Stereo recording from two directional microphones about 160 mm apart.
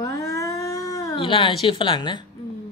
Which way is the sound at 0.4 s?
20° left (ahead or behind).